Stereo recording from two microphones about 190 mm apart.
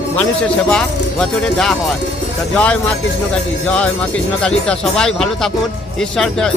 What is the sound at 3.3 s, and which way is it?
Speech, 5° left (ahead or behind).